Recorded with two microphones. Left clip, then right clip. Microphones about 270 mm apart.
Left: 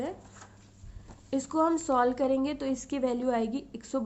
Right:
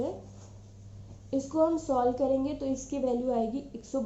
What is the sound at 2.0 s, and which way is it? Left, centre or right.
A woman's voice, left.